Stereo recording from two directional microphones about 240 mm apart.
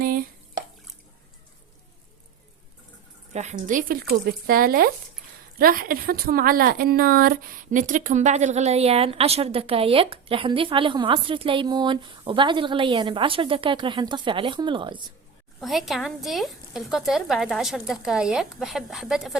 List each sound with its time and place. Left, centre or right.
0.0 s drip: right
3.3 s speech: right
15.6 s speech: centre